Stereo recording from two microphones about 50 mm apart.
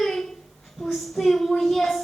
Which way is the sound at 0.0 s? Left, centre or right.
Centre.